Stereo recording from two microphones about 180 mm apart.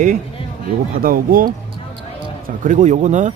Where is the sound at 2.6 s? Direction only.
45° right (ahead or behind).